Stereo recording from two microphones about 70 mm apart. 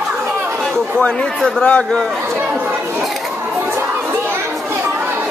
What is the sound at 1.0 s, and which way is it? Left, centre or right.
Speech, centre.